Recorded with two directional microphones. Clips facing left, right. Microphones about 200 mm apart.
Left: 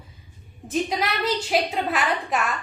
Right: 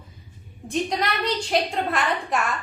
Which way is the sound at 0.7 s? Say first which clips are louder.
Even; 5° left (ahead or behind).